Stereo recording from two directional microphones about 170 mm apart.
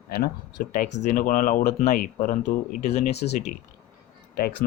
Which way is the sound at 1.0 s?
50° left (ahead or behind).